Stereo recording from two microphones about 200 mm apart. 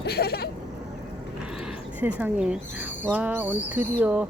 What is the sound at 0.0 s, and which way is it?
Sheep, 50° left (ahead or behind).